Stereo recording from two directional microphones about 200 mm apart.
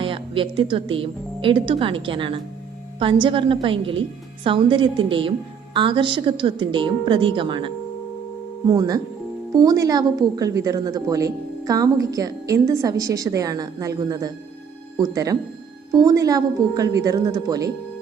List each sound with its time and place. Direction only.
0.0 s a woman's voice: 25° right (ahead or behind)